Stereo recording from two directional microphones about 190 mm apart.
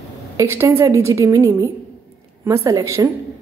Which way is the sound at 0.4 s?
15° right (ahead or behind).